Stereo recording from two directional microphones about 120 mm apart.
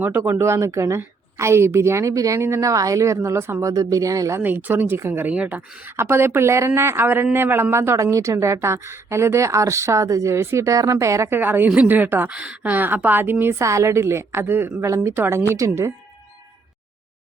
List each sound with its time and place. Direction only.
0.0 s a woman's voice: 20° right (ahead or behind)